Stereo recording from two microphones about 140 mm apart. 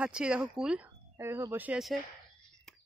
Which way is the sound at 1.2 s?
20° right (ahead or behind).